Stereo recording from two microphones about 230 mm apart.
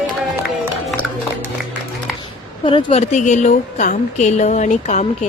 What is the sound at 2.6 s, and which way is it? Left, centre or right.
A woman's voice, left.